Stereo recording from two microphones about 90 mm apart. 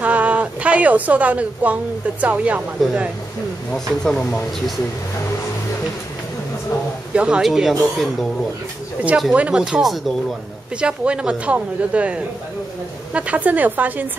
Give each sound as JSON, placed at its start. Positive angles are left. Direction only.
{"t": 0.0, "sound": "a woman's voice", "side_deg": -15}
{"t": 3.7, "sound": "speech", "side_deg": 5}
{"t": 7.2, "sound": "speech", "side_deg": -10}
{"t": 9.3, "sound": "a woman's voice", "side_deg": -10}